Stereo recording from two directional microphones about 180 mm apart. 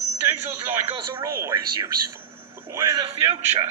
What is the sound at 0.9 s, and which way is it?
Speech, 30° right (ahead or behind).